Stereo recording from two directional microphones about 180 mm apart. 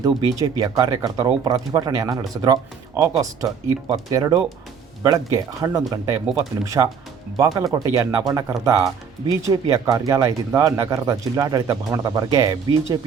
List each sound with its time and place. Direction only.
0.0 s speech: 20° right (ahead or behind)